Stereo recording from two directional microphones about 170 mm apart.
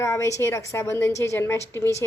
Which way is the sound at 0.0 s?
15° left (ahead or behind).